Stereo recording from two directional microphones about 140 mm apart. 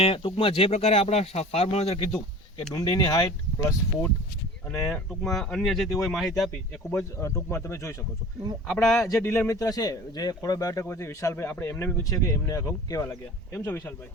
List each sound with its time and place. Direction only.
0.0 s speech: 40° left (ahead or behind)
2.7 s speech: 25° left (ahead or behind)
4.8 s speech: 5° left (ahead or behind)
6.9 s speech: 20° left (ahead or behind)
8.6 s speech: 5° left (ahead or behind)
9.2 s speech: 20° left (ahead or behind)